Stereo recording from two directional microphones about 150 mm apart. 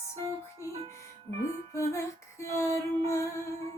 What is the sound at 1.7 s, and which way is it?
Music, 20° left (ahead or behind).